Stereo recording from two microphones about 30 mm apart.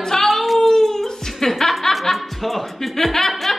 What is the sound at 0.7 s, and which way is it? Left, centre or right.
Music, centre.